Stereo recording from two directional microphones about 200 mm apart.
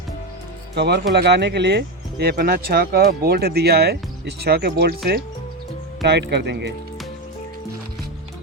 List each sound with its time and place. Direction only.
0.8 s speech: 55° right (ahead or behind)